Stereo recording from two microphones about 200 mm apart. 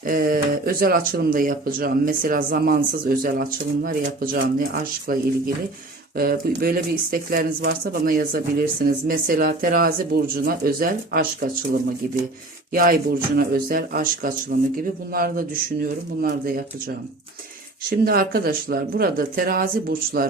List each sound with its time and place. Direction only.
0.0 s speech: 45° right (ahead or behind)
6.1 s speech: 45° right (ahead or behind)
12.7 s speech: 45° right (ahead or behind)
17.8 s speech: 50° right (ahead or behind)